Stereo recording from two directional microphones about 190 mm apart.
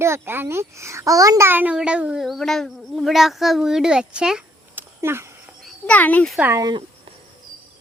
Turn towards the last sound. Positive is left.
turn(degrees=-20)  # may be behind; listen again after turning